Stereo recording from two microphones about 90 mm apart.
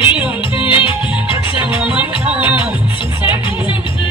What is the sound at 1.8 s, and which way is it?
Music, 10° right (ahead or behind).